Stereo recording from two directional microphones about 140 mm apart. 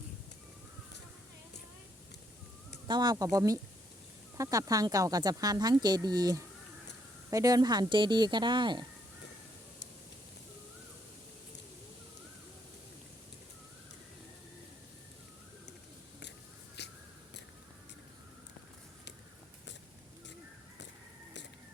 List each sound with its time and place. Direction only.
2.8 s speech: 30° right (ahead or behind)